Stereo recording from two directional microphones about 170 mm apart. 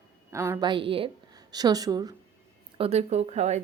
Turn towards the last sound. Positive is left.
turn(degrees=-40)  # may be behind; listen again after turning